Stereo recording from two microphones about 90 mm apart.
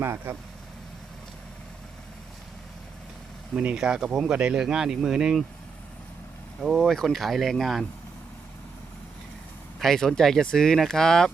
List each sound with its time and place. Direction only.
0.0 s speech: 25° right (ahead or behind)
3.5 s speech: 15° right (ahead or behind)
6.6 s speech: centre (ahead or behind)
9.8 s speech: 5° left (ahead or behind)